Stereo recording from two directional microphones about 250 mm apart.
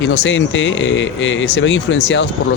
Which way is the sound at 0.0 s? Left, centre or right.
Left.